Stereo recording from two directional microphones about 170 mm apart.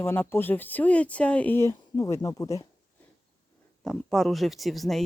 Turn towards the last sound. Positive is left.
turn(degrees=0)  # may be behind; listen again after turning